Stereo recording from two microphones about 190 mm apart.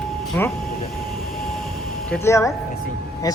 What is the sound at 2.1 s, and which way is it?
Speech, 15° left (ahead or behind).